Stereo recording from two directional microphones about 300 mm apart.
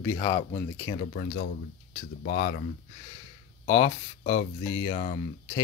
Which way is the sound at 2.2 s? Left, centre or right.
Left.